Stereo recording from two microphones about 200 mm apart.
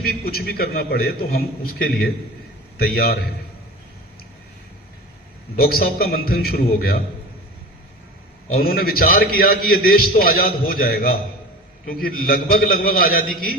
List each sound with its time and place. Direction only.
0.0 s a man's voice: 50° left (ahead or behind)
5.5 s a man's voice: 45° left (ahead or behind)
8.5 s a man's voice: 50° left (ahead or behind)